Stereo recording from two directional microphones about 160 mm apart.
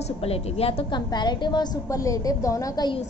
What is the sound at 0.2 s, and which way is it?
A woman's voice, 40° left (ahead or behind).